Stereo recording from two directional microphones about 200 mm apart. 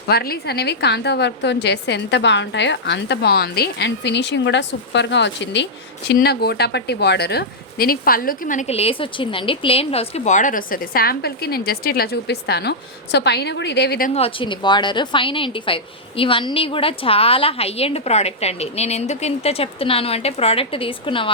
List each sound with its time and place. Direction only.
0.1 s a woman's voice: 50° left (ahead or behind)
14.1 s a woman's voice: 30° left (ahead or behind)